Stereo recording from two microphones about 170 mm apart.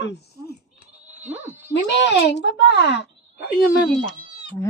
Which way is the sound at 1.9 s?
90° left.